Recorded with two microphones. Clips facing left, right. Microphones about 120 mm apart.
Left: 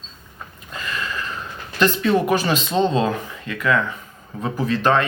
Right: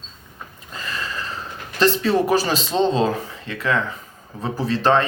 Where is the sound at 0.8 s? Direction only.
35° right (ahead or behind).